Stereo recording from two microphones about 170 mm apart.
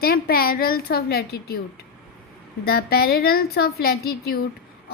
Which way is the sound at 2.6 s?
65° left (ahead or behind).